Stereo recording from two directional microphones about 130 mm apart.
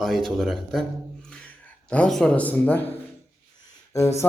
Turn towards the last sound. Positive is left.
turn(degrees=20)  # may be behind; listen again after turning